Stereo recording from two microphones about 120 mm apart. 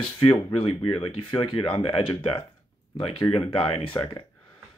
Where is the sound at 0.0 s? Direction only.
45° left (ahead or behind).